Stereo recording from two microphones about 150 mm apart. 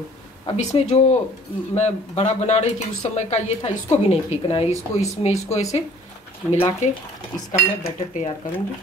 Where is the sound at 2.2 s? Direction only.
45° left (ahead or behind).